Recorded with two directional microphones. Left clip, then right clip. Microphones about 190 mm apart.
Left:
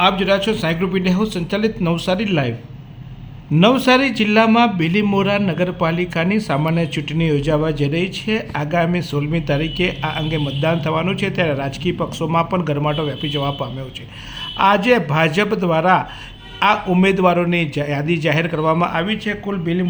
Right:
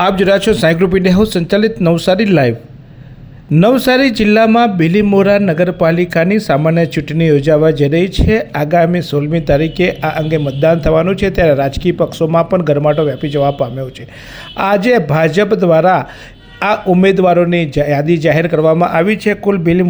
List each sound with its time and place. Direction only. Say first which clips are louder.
0.0 s a man's voice: right 5 dB; 45° right (ahead or behind)
3.5 s a man's voice: right 3 dB; 35° right (ahead or behind)